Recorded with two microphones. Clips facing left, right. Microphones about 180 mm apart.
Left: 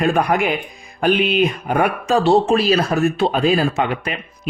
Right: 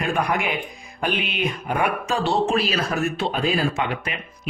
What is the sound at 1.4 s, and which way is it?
Speech, 40° left (ahead or behind).